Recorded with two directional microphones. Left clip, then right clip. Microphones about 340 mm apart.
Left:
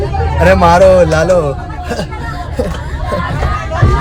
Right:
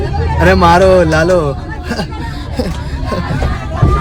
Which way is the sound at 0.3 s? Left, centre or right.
Centre.